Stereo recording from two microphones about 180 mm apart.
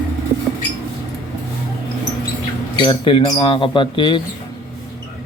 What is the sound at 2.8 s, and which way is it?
Speech, 25° left (ahead or behind).